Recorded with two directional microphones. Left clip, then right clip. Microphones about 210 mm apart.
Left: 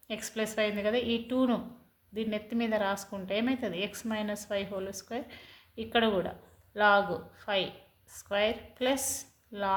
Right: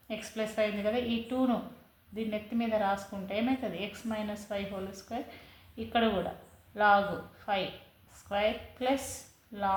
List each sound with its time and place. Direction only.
0.1 s a woman's voice: 45° left (ahead or behind)